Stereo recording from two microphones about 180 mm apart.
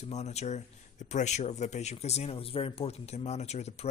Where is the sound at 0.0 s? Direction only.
40° left (ahead or behind).